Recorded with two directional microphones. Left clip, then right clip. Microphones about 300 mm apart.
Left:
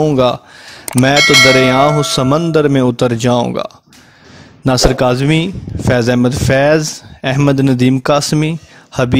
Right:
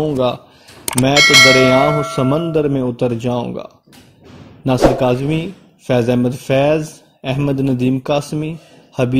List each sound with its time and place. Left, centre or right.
0.0 s speech: left
1.1 s bell: centre
1.8 s speech: left